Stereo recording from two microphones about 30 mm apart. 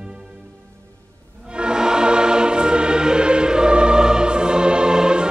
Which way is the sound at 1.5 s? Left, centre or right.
Right.